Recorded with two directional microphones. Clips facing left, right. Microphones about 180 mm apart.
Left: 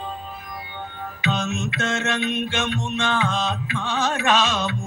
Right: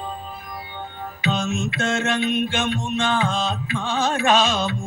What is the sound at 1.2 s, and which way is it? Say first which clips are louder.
Mantra: right 2 dB; 30° right (ahead or behind).